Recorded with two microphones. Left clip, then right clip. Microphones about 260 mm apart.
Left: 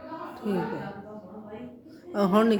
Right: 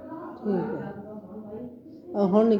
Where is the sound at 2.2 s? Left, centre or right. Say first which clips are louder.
Right 1 dB; left.